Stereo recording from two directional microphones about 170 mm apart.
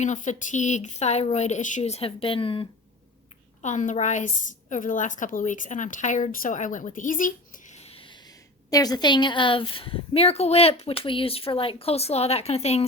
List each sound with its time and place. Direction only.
0.0 s a woman's voice: 45° left (ahead or behind)
3.6 s a woman's voice: 45° left (ahead or behind)